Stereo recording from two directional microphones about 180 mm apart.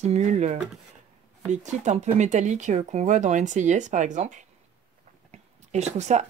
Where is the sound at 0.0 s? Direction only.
40° right (ahead or behind).